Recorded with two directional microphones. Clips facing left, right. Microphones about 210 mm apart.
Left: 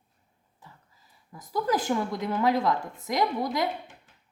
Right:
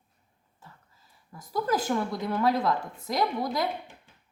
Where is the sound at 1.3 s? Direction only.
20° left (ahead or behind).